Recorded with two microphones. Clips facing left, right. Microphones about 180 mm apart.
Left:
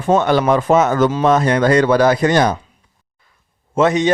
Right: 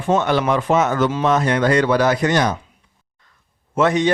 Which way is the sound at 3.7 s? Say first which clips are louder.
Left 2 dB; 25° left (ahead or behind).